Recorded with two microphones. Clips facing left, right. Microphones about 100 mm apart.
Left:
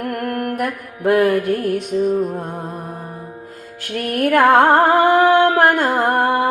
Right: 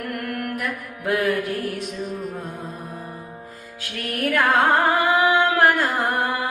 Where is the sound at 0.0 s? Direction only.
45° left (ahead or behind).